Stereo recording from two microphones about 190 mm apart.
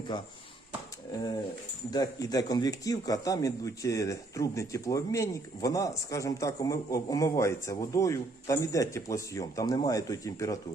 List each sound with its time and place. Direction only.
0.1 s speech: 25° left (ahead or behind)
1.9 s a man's voice: 20° left (ahead or behind)